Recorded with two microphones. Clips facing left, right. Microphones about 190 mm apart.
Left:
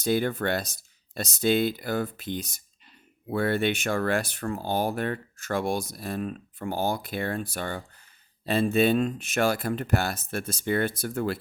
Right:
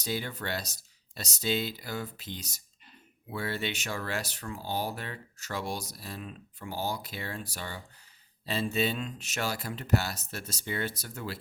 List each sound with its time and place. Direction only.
0.0 s speech: 55° left (ahead or behind)